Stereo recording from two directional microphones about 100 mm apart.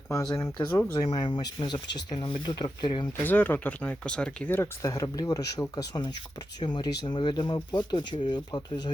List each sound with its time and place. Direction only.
0.1 s speech: 35° left (ahead or behind); by 3.1 s 50° left (ahead or behind)
3.2 s speech: 20° left (ahead or behind)
4.8 s speech: 35° left (ahead or behind)